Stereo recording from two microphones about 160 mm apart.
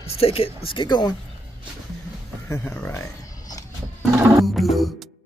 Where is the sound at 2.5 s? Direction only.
15° left (ahead or behind).